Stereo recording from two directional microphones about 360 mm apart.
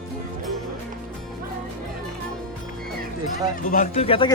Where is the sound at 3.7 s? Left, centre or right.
Centre.